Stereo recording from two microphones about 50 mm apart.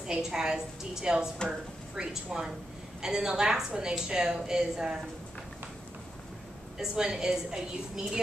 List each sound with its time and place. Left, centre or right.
0.0 s a woman's voice: centre
6.8 s a woman's voice: centre